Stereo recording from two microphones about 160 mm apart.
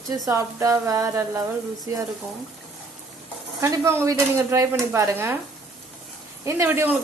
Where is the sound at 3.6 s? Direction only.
15° right (ahead or behind).